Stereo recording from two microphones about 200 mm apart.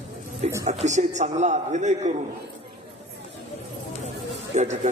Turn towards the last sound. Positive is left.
turn(degrees=-35)  # may be behind; listen again after turning